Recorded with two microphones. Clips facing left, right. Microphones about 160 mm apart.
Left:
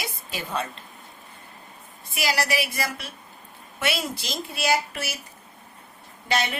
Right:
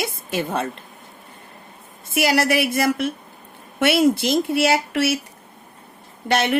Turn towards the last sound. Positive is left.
turn(degrees=-65)  # may be behind; listen again after turning